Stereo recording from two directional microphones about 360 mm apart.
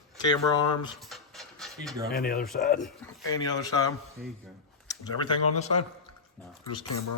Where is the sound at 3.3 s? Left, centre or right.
Centre.